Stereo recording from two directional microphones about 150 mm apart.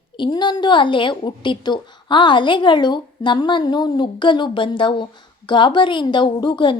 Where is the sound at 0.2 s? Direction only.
30° left (ahead or behind).